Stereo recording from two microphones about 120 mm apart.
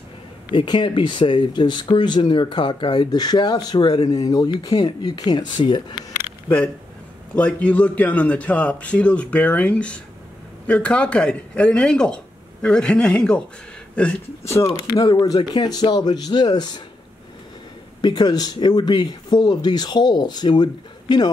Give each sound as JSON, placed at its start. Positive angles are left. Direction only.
{"t": 0.5, "sound": "speech", "side_deg": 40}
{"t": 7.3, "sound": "speech", "side_deg": 10}
{"t": 15.0, "sound": "speech", "side_deg": 30}
{"t": 18.0, "sound": "speech", "side_deg": 35}